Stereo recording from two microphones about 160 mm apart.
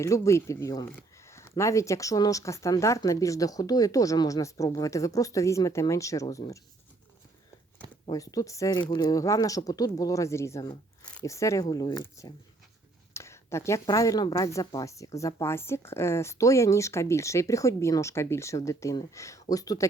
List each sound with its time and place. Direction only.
0.0 s speech: 20° left (ahead or behind)
8.1 s speech: 20° left (ahead or behind)